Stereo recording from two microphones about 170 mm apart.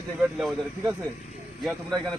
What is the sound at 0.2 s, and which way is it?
Speech, centre (ahead or behind).